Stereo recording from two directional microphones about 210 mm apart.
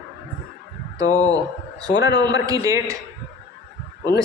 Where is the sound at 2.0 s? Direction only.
20° right (ahead or behind).